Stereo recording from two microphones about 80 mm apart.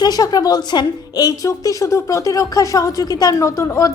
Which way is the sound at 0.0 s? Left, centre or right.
Left.